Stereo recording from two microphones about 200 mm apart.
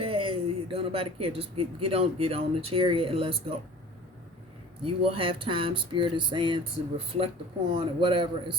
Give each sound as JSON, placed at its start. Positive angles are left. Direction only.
{"t": 0.0, "sound": "speech", "side_deg": -25}
{"t": 4.8, "sound": "speech", "side_deg": -25}